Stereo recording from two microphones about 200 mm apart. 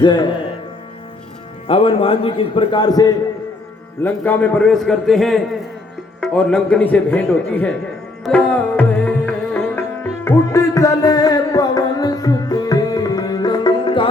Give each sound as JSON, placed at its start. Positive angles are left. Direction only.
{"t": 0.0, "sound": "a man's voice", "side_deg": 20}
{"t": 1.6, "sound": "a man's voice", "side_deg": 25}
{"t": 4.0, "sound": "a man's voice", "side_deg": 10}
{"t": 8.2, "sound": "music", "side_deg": 5}